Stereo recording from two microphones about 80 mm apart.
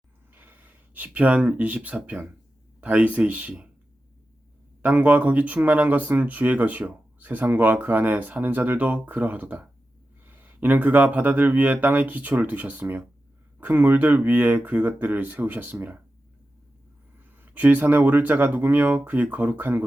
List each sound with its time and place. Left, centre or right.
0.3 s speech: right
4.8 s speech: centre
17.3 s speech: right